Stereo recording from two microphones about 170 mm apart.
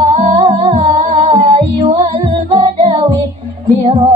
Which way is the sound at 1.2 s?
35° right (ahead or behind).